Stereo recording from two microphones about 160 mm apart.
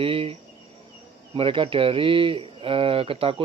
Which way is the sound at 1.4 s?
35° right (ahead or behind).